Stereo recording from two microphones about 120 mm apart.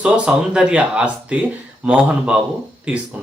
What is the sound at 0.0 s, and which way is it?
Speech, 5° right (ahead or behind).